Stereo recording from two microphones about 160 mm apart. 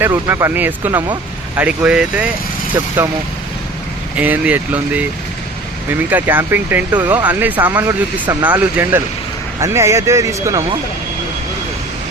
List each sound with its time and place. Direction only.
0.0 s speech: 15° right (ahead or behind)
4.2 s speech: 10° right (ahead or behind)
6.1 s speech: 10° right (ahead or behind)